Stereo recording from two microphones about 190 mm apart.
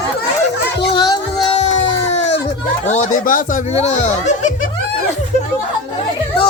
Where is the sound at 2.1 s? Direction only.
35° left (ahead or behind).